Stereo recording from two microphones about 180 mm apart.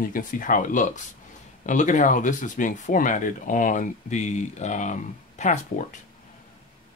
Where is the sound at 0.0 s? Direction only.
50° left (ahead or behind).